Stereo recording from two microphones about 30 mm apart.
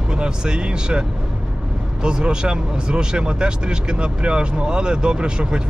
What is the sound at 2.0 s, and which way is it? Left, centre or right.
Speech, right.